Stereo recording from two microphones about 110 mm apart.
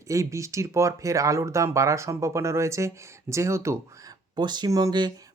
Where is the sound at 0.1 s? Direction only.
30° right (ahead or behind).